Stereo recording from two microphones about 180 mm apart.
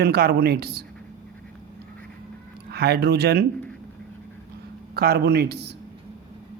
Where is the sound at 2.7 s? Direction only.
60° right (ahead or behind).